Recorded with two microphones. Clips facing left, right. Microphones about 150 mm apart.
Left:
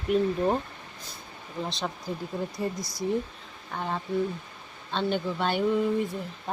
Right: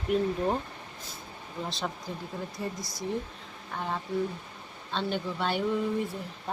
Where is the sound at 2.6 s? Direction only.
15° left (ahead or behind).